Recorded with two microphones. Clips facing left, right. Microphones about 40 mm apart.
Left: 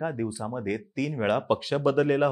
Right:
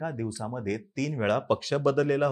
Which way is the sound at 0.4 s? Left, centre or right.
Centre.